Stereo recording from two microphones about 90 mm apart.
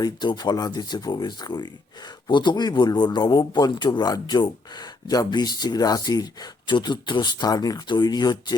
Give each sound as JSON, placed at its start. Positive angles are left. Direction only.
{"t": 0.0, "sound": "a man's voice", "side_deg": 55}